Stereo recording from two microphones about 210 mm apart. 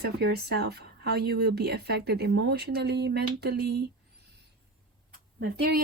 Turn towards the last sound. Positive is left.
turn(degrees=-50)  # may be behind; listen again after turning